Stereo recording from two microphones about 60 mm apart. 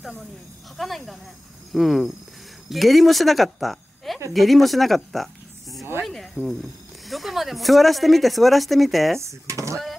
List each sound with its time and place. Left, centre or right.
0.7 s a woman's voice: centre
9.2 s speech: right